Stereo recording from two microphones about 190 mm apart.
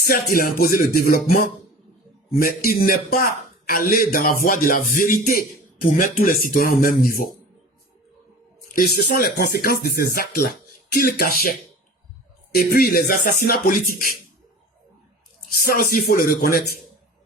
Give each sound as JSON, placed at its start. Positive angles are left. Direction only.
{"t": 0.0, "sound": "speech", "side_deg": 50}
{"t": 2.4, "sound": "speech", "side_deg": 50}
{"t": 8.7, "sound": "speech", "side_deg": 50}
{"t": 15.6, "sound": "speech", "side_deg": 50}